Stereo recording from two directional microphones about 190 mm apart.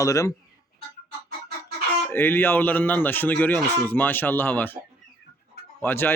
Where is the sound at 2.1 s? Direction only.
10° left (ahead or behind).